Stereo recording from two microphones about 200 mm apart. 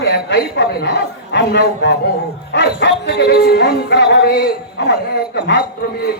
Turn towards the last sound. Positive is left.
turn(degrees=50)  # may be behind; listen again after turning